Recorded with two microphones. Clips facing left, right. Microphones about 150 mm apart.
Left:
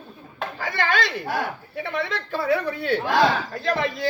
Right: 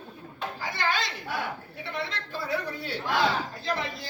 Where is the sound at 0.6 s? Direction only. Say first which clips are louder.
Left 6 dB; 60° left (ahead or behind).